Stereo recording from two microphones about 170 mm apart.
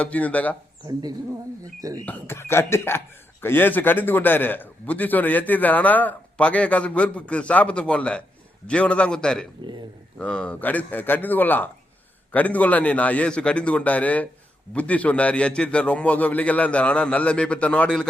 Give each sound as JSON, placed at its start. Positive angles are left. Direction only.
{"t": 0.0, "sound": "a man's voice", "side_deg": 10}
{"t": 1.8, "sound": "speech", "side_deg": -20}
{"t": 2.0, "sound": "a man's voice", "side_deg": 10}